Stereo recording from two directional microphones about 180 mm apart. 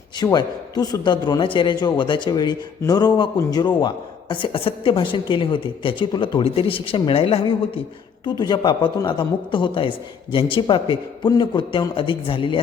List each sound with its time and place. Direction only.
0.2 s a man's voice: 20° left (ahead or behind)